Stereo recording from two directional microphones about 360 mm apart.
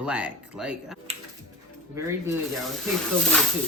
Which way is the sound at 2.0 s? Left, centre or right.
Centre.